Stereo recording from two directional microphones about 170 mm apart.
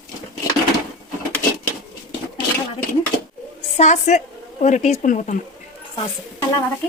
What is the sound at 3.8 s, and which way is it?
Speech, 45° left (ahead or behind).